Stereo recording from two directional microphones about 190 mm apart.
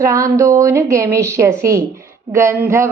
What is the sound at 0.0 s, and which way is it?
A woman's voice, 15° right (ahead or behind).